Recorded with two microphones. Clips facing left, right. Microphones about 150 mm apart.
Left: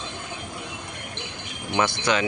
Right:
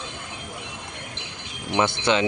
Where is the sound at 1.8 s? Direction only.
25° right (ahead or behind).